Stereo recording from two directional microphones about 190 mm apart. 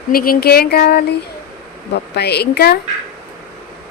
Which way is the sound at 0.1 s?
50° left (ahead or behind).